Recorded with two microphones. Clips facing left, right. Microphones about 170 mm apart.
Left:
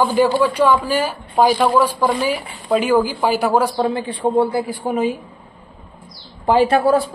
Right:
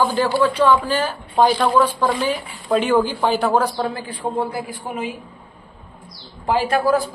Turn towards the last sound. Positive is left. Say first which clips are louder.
# left 4 dB
turn(degrees=30)  # may be behind; listen again after turning